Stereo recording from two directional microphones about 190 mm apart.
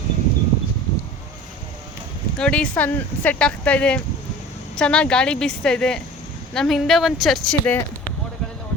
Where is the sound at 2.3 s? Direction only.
5° left (ahead or behind).